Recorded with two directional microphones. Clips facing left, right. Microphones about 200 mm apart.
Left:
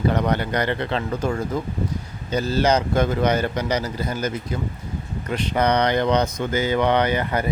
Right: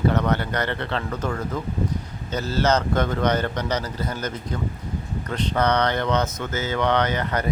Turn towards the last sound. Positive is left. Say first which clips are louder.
# left 2 dB
turn(degrees=10)  # may be behind; listen again after turning